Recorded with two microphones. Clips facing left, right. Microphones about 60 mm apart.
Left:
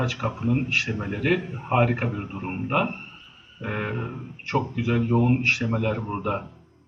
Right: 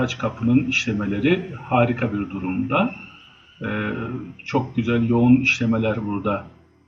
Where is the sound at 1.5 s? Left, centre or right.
Centre.